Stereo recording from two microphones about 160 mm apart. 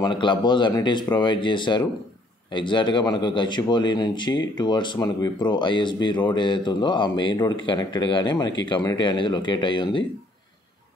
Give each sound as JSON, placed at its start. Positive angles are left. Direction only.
{"t": 0.0, "sound": "speech", "side_deg": 30}